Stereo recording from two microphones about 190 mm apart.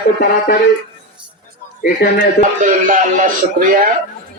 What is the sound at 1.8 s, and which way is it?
Speech, 55° left (ahead or behind).